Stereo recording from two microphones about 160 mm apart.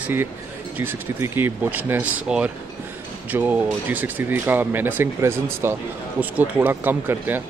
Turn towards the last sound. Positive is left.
turn(degrees=-10)  # may be behind; listen again after turning